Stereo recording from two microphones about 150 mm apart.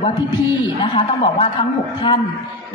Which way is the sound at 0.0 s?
30° left (ahead or behind).